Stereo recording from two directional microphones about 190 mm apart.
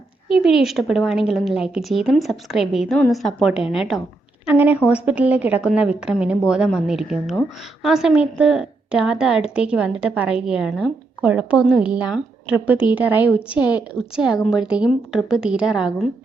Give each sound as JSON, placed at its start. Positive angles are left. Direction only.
{"t": 0.3, "sound": "a woman's voice", "side_deg": -5}